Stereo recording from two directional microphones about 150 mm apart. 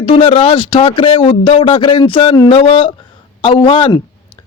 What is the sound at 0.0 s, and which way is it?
A man's voice, 35° left (ahead or behind).